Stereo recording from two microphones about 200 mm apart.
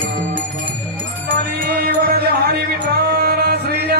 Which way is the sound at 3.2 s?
50° right (ahead or behind).